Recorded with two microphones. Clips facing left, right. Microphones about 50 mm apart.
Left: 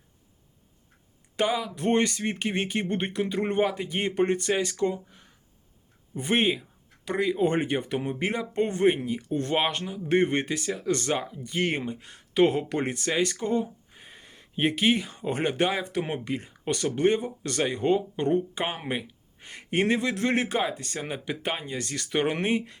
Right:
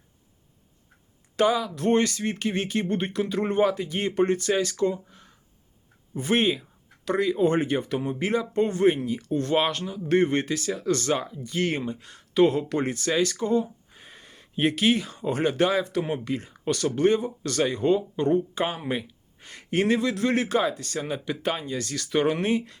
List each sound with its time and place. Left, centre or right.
1.4 s speech: centre
1.7 s speech: left
13.9 s a sound: centre
15.1 s speech: left